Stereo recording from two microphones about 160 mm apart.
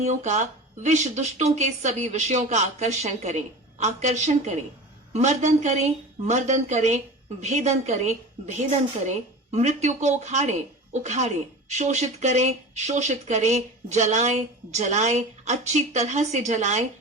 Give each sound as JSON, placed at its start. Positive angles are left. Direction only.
{"t": 0.0, "sound": "speech", "side_deg": -45}